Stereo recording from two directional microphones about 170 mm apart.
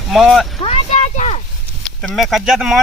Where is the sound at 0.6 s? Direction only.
40° left (ahead or behind).